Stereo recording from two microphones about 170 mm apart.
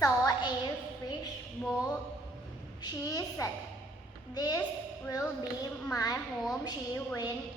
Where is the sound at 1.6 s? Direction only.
Centre (ahead or behind).